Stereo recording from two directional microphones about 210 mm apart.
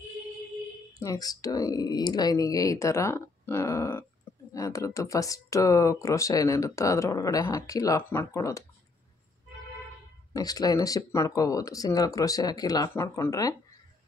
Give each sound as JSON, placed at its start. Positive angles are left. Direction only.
{"t": 0.9, "sound": "speech", "side_deg": 15}
{"t": 10.3, "sound": "speech", "side_deg": 15}